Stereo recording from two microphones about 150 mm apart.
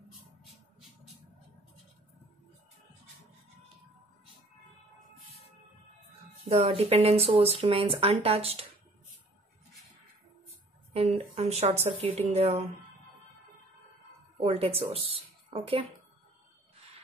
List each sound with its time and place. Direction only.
6.5 s speech: 40° right (ahead or behind)
10.9 s speech: 40° right (ahead or behind)
14.4 s speech: 40° right (ahead or behind)